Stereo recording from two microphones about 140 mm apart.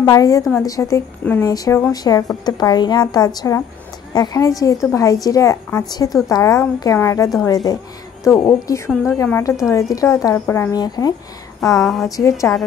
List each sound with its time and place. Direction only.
0.0 s a woman's voice: 25° left (ahead or behind)
11.8 s a woman's voice: centre (ahead or behind)
12.2 s a woman's voice: 25° left (ahead or behind)